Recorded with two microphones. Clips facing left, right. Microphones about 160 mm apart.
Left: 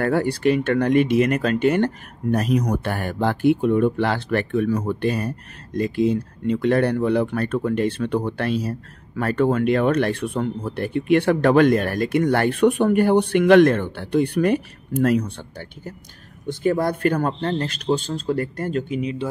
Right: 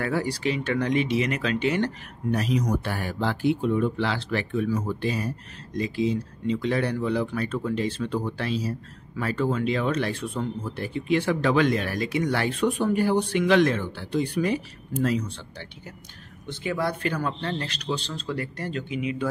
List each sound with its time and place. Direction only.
0.0 s a man's voice: 55° left (ahead or behind)